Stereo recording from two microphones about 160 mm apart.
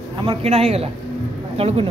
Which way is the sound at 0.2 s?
40° right (ahead or behind).